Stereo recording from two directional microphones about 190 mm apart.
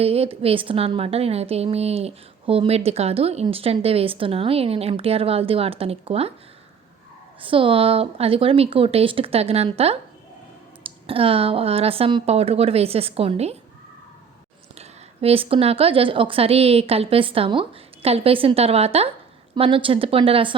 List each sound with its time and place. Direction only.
0.0 s a woman's voice: 30° right (ahead or behind)
7.4 s a woman's voice: 30° right (ahead or behind)
14.8 s a woman's voice: 30° right (ahead or behind)